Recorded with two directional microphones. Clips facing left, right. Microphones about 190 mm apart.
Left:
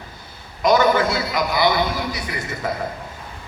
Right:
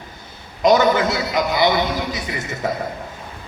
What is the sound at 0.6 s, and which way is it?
A man's voice, 20° right (ahead or behind).